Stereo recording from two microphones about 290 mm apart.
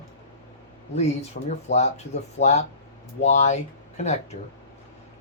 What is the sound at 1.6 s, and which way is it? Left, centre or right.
Speech, left.